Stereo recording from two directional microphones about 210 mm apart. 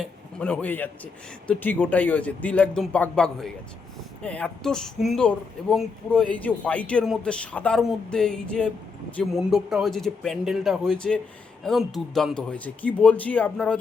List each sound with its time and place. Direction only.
0.0 s speech: 5° left (ahead or behind)